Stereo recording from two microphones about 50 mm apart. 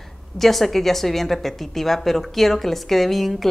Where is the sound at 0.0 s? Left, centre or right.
Centre.